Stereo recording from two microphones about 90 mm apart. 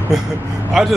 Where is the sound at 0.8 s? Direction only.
5° right (ahead or behind).